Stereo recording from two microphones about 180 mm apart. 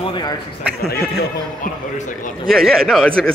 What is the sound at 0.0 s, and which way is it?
Speech, 25° left (ahead or behind).